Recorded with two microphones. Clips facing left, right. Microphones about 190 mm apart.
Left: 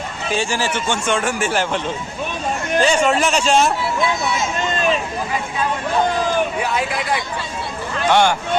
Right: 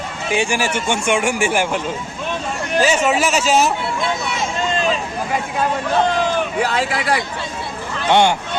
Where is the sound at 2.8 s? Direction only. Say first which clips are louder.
Even; 5° right (ahead or behind).